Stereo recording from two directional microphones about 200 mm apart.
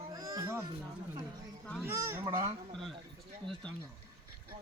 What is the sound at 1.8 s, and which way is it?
Speech, 15° right (ahead or behind).